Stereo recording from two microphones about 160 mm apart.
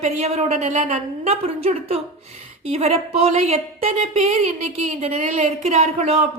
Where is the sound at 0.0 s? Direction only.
45° right (ahead or behind).